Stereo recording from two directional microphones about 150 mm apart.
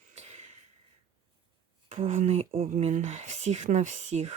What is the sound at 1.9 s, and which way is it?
Speech, 40° right (ahead or behind).